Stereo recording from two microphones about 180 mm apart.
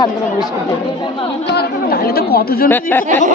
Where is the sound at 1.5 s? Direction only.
60° left (ahead or behind).